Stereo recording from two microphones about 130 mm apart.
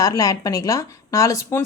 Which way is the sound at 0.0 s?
25° left (ahead or behind).